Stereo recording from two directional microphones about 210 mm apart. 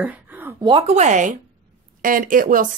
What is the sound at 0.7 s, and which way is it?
A woman's voice, 30° right (ahead or behind).